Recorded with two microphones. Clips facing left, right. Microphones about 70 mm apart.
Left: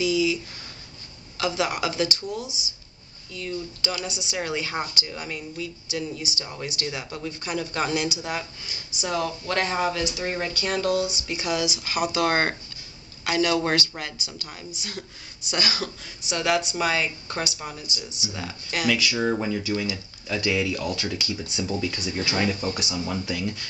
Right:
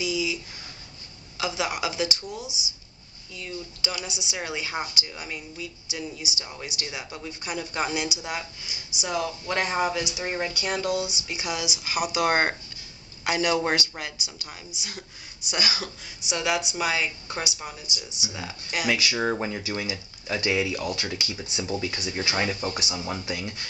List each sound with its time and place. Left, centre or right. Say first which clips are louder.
0.0 s speech: left 5 dB; centre
1.4 s speech: left 3 dB; centre